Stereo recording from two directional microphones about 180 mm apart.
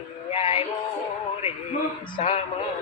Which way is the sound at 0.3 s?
35° left (ahead or behind).